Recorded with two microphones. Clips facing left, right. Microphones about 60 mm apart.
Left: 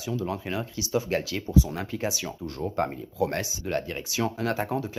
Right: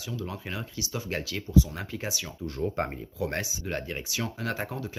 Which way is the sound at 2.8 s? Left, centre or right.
Right.